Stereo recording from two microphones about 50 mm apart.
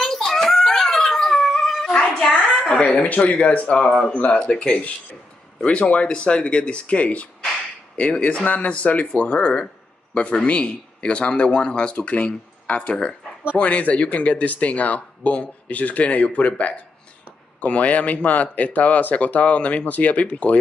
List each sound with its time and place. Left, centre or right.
0.0 s dog: centre
2.9 s speech: left
3.2 s speech: left
3.8 s speech: centre
4.1 s speech: left